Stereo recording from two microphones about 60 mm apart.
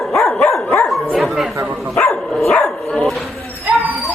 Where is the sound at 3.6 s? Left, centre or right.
Right.